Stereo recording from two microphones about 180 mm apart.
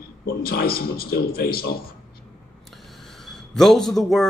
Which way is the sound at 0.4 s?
55° left (ahead or behind).